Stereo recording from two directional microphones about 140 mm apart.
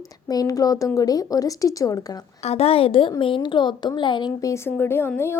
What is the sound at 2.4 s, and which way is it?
A woman's voice, 50° left (ahead or behind).